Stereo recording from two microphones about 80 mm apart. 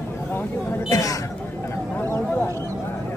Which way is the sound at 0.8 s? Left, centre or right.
Left.